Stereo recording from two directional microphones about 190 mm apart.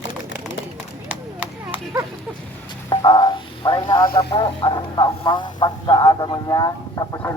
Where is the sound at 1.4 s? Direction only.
10° right (ahead or behind).